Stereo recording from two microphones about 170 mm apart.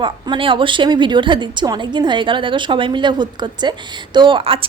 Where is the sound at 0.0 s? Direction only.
30° right (ahead or behind).